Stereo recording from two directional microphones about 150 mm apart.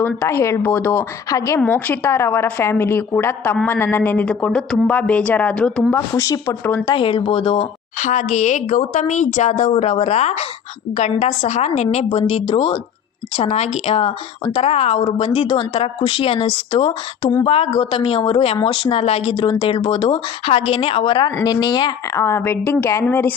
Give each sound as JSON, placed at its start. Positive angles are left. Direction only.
{"t": 0.0, "sound": "a woman's voice", "side_deg": 15}
{"t": 6.1, "sound": "speech", "side_deg": 20}
{"t": 6.9, "sound": "a woman's voice", "side_deg": 35}
{"t": 7.9, "sound": "a woman's voice", "side_deg": 55}
{"t": 9.7, "sound": "a woman's voice", "side_deg": 45}
{"t": 22.1, "sound": "a woman's voice", "side_deg": 20}